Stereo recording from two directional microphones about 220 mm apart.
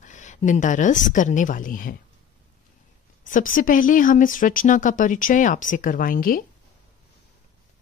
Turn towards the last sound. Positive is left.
turn(degrees=40)  # may be behind; listen again after turning